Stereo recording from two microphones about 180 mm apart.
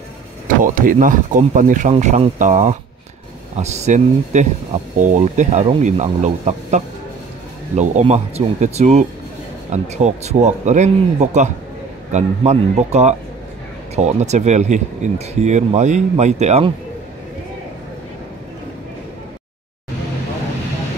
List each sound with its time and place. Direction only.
0.7 s speech: 50° right (ahead or behind)